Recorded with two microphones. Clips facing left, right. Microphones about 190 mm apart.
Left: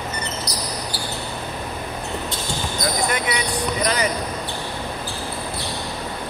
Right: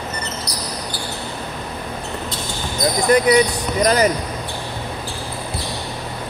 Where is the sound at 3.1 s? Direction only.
40° right (ahead or behind).